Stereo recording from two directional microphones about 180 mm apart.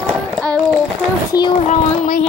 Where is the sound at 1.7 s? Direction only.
40° left (ahead or behind).